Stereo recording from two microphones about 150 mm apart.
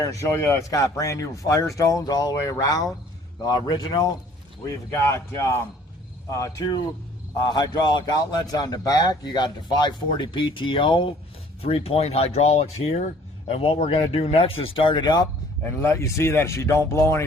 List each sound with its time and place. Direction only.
0.0 s a man's voice: 20° left (ahead or behind)
15.8 s a man's voice: 20° left (ahead or behind)